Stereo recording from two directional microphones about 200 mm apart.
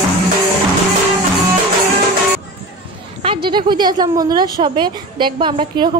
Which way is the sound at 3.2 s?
25° right (ahead or behind).